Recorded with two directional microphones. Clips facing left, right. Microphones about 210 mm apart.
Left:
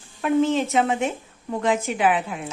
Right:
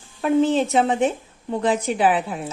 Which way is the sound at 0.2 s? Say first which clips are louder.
Right 2 dB; 35° right (ahead or behind).